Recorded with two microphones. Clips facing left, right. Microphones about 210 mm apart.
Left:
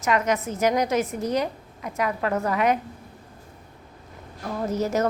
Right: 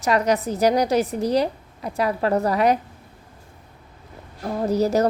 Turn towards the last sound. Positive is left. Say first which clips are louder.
# right 5 dB
turn(degrees=-35)  # may be behind; listen again after turning